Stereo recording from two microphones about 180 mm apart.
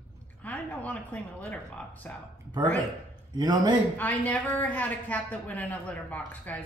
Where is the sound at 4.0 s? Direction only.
10° left (ahead or behind).